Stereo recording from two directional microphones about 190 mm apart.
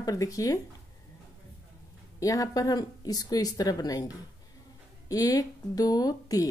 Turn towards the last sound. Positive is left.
turn(degrees=20)  # may be behind; listen again after turning